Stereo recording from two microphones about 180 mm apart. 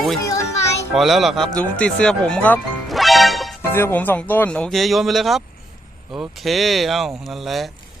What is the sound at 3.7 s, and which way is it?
Speech, 10° left (ahead or behind).